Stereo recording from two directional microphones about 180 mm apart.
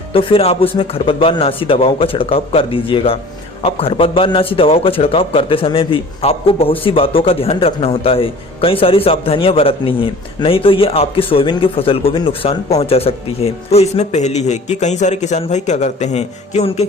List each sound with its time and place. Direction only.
0.1 s a man's voice: 30° left (ahead or behind)